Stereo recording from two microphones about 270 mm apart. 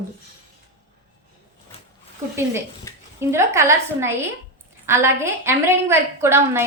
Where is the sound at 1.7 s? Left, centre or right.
Left.